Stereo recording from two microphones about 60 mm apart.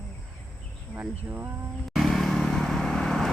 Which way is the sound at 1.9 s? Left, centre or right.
Centre.